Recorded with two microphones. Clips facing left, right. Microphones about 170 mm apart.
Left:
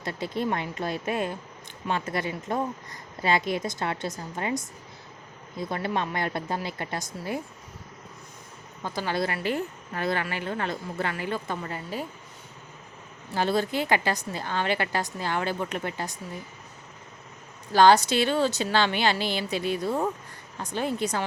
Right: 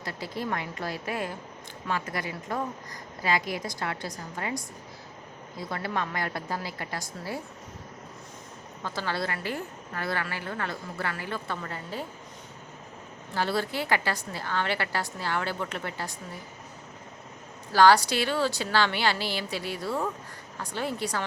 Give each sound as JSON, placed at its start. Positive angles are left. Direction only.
{"t": 0.0, "sound": "a woman's voice", "side_deg": 25}
{"t": 8.8, "sound": "a woman's voice", "side_deg": 15}
{"t": 13.3, "sound": "a woman's voice", "side_deg": 20}
{"t": 17.7, "sound": "a woman's voice", "side_deg": 20}